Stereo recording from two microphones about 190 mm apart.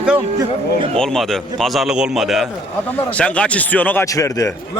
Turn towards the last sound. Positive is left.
turn(degrees=15)  # may be behind; listen again after turning